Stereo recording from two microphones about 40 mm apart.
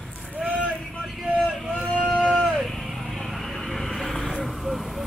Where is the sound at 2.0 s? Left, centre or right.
Centre.